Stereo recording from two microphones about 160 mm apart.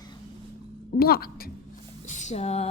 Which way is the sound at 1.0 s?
70° left (ahead or behind).